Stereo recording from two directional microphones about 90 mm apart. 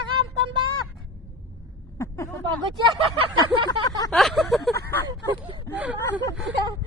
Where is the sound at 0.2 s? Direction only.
65° right (ahead or behind).